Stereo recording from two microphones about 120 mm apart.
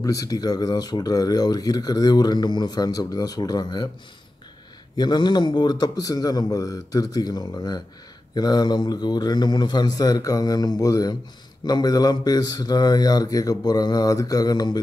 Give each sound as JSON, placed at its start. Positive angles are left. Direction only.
{"t": 0.0, "sound": "speech", "side_deg": 30}
{"t": 4.9, "sound": "speech", "side_deg": 40}